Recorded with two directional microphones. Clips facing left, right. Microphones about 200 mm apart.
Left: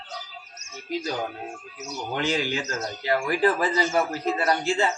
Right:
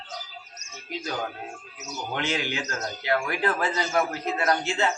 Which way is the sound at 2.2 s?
35° left (ahead or behind).